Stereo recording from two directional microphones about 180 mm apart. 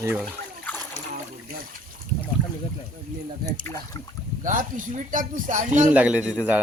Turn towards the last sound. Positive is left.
turn(degrees=-5)  # may be behind; listen again after turning